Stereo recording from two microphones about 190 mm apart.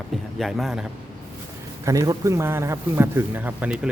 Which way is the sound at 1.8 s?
15° right (ahead or behind).